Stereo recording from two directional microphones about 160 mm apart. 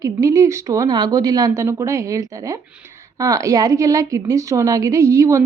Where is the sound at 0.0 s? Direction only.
20° right (ahead or behind).